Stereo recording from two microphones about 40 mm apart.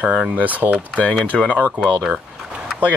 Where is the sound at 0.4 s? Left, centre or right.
Right.